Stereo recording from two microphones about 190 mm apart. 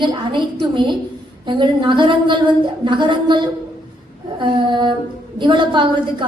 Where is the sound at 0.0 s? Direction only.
25° right (ahead or behind).